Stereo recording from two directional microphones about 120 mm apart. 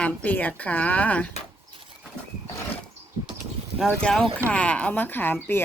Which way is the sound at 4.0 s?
10° left (ahead or behind).